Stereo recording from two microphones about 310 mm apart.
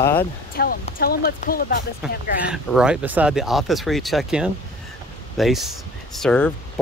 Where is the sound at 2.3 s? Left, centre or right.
Centre.